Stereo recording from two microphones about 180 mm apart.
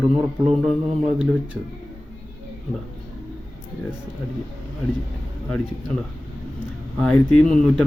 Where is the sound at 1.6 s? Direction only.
Centre (ahead or behind).